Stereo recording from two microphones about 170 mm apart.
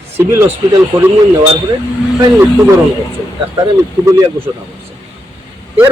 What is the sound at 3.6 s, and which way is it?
Speech, 20° right (ahead or behind).